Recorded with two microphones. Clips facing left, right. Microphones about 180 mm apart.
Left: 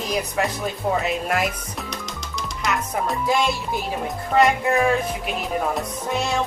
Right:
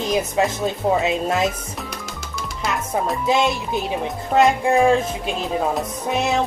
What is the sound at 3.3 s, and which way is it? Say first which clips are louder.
Music: right 3 dB; 20° right (ahead or behind).